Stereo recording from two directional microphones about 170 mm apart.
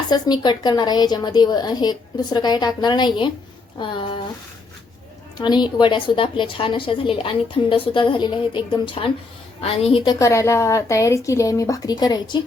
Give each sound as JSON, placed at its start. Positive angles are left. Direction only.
{"t": 0.1, "sound": "a woman's voice", "side_deg": 25}
{"t": 5.4, "sound": "a woman's voice", "side_deg": 25}
{"t": 10.2, "sound": "a woman's voice", "side_deg": 15}